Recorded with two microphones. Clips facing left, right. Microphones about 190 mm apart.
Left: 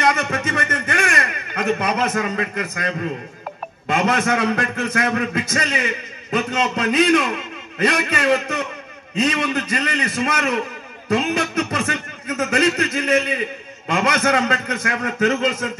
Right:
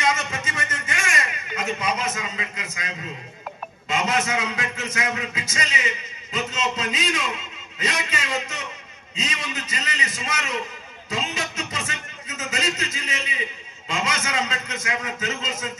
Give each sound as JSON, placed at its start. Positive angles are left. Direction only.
{"t": 0.0, "sound": "a man's voice", "side_deg": 60}